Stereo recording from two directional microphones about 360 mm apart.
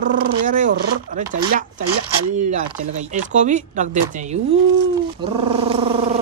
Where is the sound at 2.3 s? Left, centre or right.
Centre.